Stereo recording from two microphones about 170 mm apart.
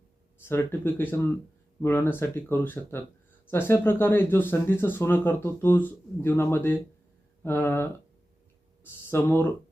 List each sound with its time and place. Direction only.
0.4 s speech: 15° left (ahead or behind)
9.0 s speech: 10° left (ahead or behind)